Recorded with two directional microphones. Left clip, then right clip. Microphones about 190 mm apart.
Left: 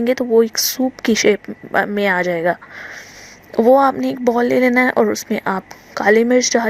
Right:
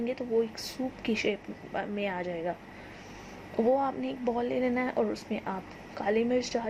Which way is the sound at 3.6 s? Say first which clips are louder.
Left 15 dB; 50° left (ahead or behind).